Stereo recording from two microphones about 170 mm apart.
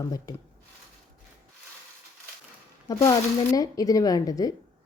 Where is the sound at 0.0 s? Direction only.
20° left (ahead or behind).